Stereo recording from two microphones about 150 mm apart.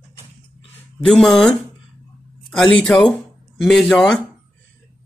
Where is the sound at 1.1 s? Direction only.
Centre (ahead or behind).